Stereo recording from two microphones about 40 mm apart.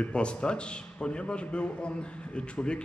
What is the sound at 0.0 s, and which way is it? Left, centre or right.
A man's voice, left.